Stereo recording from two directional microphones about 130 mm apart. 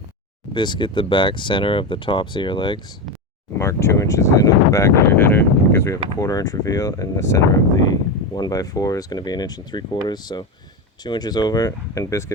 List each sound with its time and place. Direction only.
0.5 s speech: 35° left (ahead or behind)
3.6 s speech: 20° left (ahead or behind)